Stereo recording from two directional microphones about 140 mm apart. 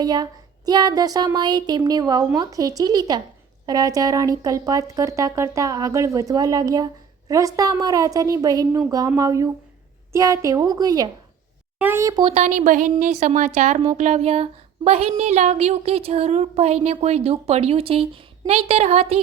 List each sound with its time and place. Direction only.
0.0 s speech: 30° right (ahead or behind)
12.4 s a woman's voice: 65° right (ahead or behind); by 19.2 s 45° right (ahead or behind)